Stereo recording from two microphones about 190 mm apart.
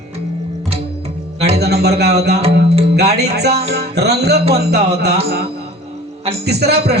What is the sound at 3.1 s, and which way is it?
A man's voice, 60° right (ahead or behind).